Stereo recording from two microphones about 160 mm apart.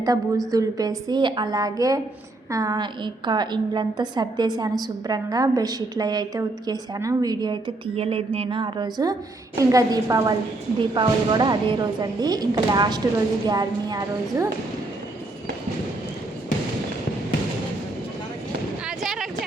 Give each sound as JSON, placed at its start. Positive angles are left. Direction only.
{"t": 0.5, "sound": "a woman's voice", "side_deg": -20}
{"t": 7.9, "sound": "a woman's voice", "side_deg": -35}
{"t": 18.9, "sound": "a sound", "side_deg": 0}